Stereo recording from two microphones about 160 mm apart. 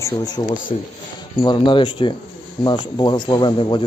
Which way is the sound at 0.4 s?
25° left (ahead or behind).